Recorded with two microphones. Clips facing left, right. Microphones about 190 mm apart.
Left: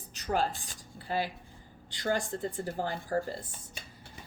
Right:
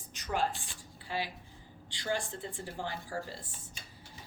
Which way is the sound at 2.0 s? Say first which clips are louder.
Left 4 dB; 50° left (ahead or behind).